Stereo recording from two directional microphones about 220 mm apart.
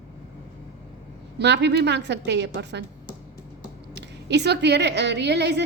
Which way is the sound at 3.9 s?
50° right (ahead or behind).